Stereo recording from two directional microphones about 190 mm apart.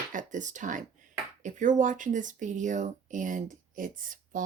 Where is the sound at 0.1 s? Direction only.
40° right (ahead or behind).